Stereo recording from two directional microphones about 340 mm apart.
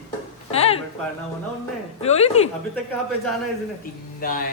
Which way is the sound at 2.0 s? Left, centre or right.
Centre.